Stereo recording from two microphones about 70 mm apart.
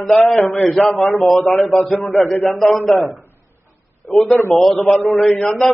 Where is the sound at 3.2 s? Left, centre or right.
Left.